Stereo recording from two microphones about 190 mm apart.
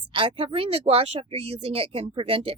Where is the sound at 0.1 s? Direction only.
25° right (ahead or behind).